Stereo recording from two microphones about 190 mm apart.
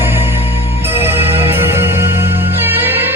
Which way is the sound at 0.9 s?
10° right (ahead or behind).